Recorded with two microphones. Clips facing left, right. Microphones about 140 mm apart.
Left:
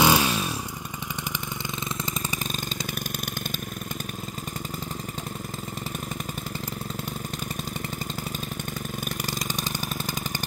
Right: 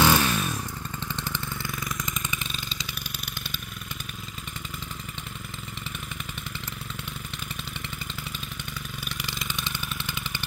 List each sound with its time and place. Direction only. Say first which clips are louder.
0.0 s motorcycle: left 1 dB; 15° left (ahead or behind)
9.1 s engine: left 4 dB; 40° left (ahead or behind)